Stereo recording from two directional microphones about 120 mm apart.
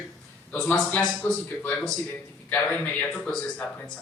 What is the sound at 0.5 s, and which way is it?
Speech, 10° left (ahead or behind).